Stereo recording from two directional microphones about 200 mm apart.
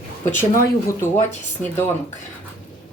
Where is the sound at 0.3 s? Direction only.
10° left (ahead or behind).